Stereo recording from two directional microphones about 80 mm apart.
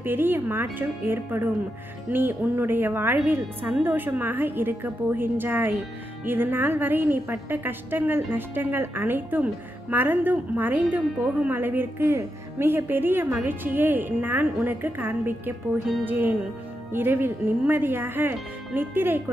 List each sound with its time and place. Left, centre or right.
0.0 s a woman's voice: right